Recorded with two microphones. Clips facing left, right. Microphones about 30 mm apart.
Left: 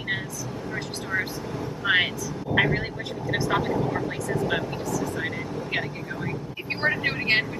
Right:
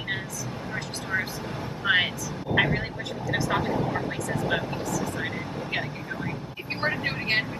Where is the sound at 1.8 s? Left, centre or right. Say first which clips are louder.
Left 1 dB; centre.